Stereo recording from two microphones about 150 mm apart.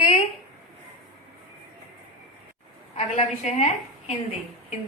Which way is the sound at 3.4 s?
50° left (ahead or behind).